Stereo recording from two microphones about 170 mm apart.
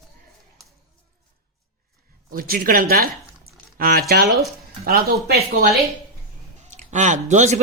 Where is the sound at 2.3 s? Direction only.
60° right (ahead or behind).